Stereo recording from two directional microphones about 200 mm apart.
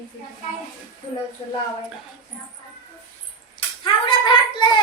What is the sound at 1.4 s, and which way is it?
Speech, 25° left (ahead or behind).